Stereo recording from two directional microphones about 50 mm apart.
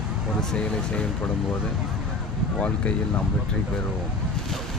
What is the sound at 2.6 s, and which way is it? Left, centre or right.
Speech, left.